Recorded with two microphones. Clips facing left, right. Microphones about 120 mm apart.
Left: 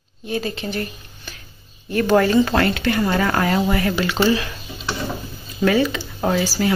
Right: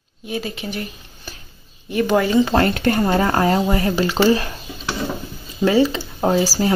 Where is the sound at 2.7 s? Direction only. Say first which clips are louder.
Right 2 dB; 40° right (ahead or behind).